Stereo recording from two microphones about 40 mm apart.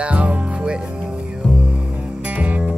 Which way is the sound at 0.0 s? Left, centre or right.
Right.